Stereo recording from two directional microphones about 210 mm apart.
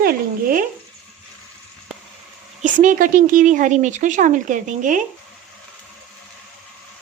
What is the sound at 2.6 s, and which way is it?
Speech, 40° right (ahead or behind).